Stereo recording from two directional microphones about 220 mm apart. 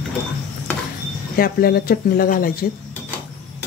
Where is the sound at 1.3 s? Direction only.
45° left (ahead or behind).